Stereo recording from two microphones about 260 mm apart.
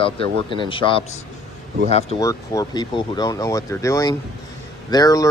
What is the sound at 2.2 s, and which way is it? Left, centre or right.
Speech, centre.